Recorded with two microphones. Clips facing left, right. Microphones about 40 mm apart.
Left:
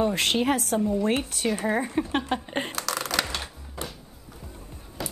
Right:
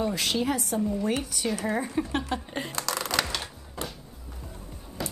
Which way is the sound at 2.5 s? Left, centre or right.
Left.